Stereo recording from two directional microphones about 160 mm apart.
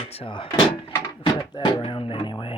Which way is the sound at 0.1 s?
35° left (ahead or behind).